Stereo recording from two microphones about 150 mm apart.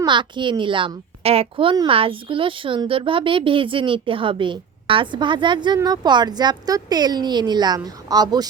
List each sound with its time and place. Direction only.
0.0 s a woman's voice: 30° right (ahead or behind)